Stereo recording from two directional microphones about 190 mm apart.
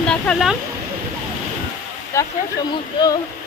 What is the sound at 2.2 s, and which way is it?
Speech, 15° left (ahead or behind).